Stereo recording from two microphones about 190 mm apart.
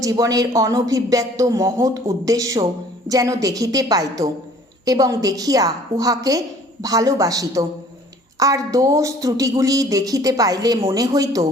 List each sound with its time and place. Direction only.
0.0 s a woman's voice: 20° right (ahead or behind)